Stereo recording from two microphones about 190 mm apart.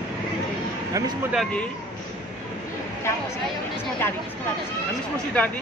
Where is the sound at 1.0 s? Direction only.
15° right (ahead or behind).